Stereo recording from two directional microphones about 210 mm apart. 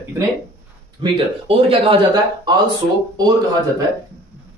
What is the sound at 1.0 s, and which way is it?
Speech, 25° right (ahead or behind).